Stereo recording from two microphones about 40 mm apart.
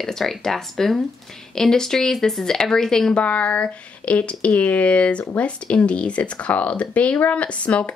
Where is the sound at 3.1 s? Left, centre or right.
Left.